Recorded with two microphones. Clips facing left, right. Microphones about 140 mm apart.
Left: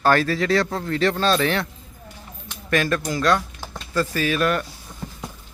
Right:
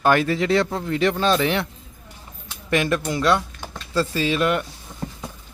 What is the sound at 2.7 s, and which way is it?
Speech, 20° right (ahead or behind).